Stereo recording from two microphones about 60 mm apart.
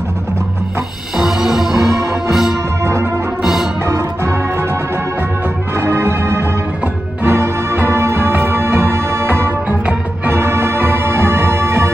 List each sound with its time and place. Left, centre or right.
1.1 s music: centre
2.8 s music: right
5.8 s music: right
9.7 s music: right
10.3 s music: right